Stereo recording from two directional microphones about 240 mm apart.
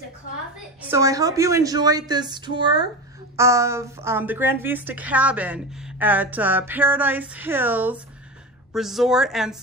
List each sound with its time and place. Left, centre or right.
0.8 s a woman's voice: centre